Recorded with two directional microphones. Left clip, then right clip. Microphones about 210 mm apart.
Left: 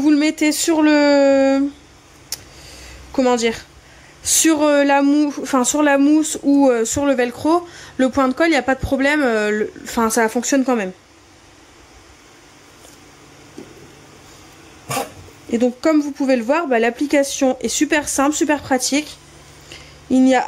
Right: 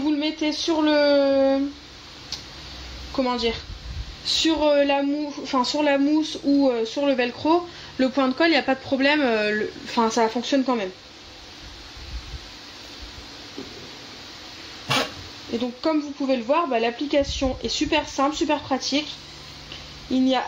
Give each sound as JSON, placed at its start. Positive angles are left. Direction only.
{"t": 0.0, "sound": "speech", "side_deg": 55}
{"t": 3.2, "sound": "speech", "side_deg": 55}
{"t": 15.6, "sound": "speech", "side_deg": 55}
{"t": 20.1, "sound": "speech", "side_deg": 45}